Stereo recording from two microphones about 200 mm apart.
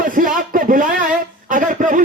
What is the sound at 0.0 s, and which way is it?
Speech, 40° right (ahead or behind).